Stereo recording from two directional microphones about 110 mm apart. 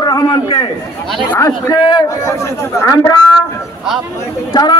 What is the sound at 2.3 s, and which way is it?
Speech, 25° left (ahead or behind).